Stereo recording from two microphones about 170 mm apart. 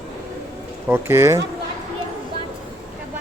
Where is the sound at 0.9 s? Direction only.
15° right (ahead or behind).